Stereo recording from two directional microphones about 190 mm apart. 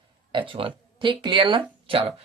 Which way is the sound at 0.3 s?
25° right (ahead or behind).